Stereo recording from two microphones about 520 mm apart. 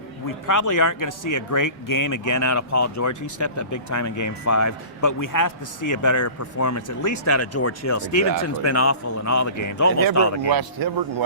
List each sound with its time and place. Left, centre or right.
0.4 s speech: left
10.5 s speech: right